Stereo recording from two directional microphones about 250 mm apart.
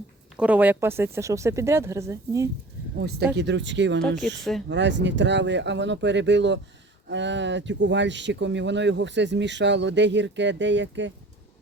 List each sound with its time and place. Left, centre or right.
0.3 s speech: centre
3.0 s speech: right